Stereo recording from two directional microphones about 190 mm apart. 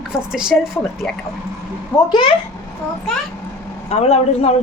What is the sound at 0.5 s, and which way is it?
Speech, 5° left (ahead or behind).